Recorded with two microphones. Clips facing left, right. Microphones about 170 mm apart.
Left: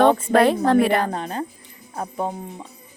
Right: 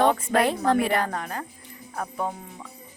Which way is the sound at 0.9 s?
25° left (ahead or behind).